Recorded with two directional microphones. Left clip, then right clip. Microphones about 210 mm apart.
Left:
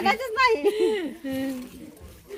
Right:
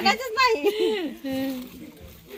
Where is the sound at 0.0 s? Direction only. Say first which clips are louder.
Even; centre (ahead or behind).